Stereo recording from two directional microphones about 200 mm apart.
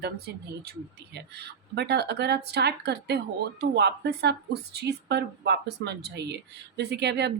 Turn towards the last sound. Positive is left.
turn(degrees=-55)  # may be behind; listen again after turning